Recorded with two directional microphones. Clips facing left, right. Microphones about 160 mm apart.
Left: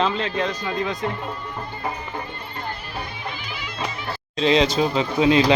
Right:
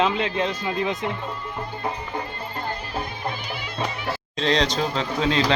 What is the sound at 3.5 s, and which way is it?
Music, 60° right (ahead or behind).